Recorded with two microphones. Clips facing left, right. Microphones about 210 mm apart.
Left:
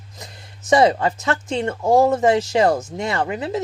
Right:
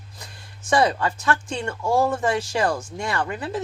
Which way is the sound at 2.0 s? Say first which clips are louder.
Left 6 dB; 20° left (ahead or behind).